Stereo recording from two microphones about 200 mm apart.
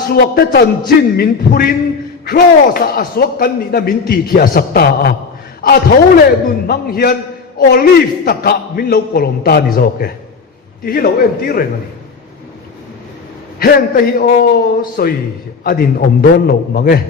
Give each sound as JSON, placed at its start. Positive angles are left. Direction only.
{"t": 0.1, "sound": "a man's voice", "side_deg": 50}
{"t": 13.6, "sound": "a man's voice", "side_deg": 45}